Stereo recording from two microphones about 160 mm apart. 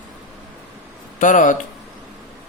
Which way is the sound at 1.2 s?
55° left (ahead or behind).